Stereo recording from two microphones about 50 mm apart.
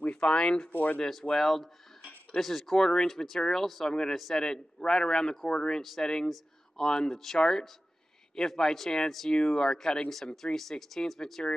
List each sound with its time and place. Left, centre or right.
0.0 s speech: left
0.7 s speech: left
1.4 s speech: centre